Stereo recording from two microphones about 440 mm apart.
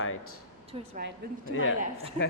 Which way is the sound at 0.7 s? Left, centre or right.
Centre.